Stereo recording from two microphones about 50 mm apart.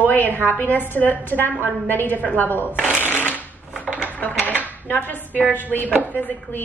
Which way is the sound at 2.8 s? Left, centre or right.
Left.